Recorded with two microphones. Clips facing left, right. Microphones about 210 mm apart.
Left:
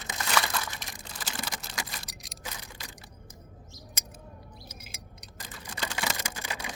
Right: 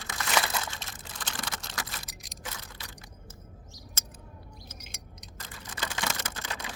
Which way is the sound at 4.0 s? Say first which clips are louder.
Left 1 dB; 15° left (ahead or behind).